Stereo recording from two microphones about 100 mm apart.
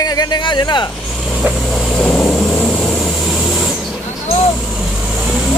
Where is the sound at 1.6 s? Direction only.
5° left (ahead or behind).